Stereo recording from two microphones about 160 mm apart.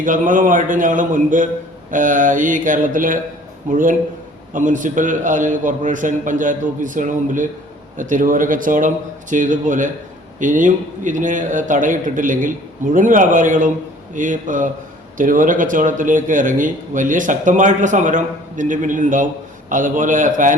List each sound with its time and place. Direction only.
0.0 s a man's voice: 55° right (ahead or behind)